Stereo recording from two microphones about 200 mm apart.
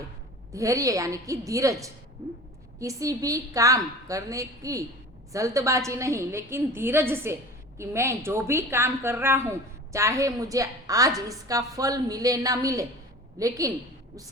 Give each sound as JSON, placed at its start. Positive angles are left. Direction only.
{"t": 0.5, "sound": "speech", "side_deg": -15}
{"t": 2.8, "sound": "speech", "side_deg": -15}